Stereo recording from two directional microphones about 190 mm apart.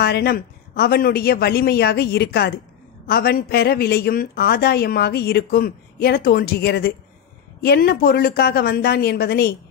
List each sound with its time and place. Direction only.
0.0 s a woman's voice: 55° left (ahead or behind)